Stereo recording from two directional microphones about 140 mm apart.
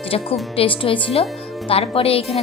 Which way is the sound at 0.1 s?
45° left (ahead or behind).